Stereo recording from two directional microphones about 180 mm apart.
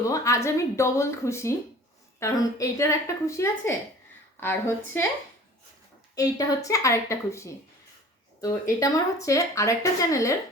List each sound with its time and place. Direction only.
0.1 s speech: 15° left (ahead or behind)
6.1 s a woman's voice: 20° left (ahead or behind)